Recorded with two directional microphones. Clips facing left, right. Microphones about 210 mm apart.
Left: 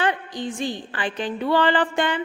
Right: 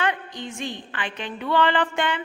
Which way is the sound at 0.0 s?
35° left (ahead or behind).